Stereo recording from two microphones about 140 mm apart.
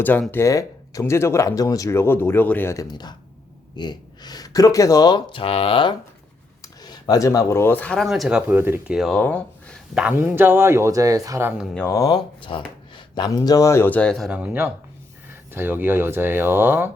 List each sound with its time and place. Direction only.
0.0 s speech: 15° left (ahead or behind)
2.8 s speech: 30° left (ahead or behind)
6.6 s speech: 25° left (ahead or behind); by 9.0 s 15° right (ahead or behind)
9.0 s speech: 5° left (ahead or behind)
9.9 s speech: 10° right (ahead or behind)
11.9 s speech: 25° left (ahead or behind)
12.4 s speech: 40° left (ahead or behind); by 14.3 s 5° left (ahead or behind)
14.3 s speech: 10° right (ahead or behind)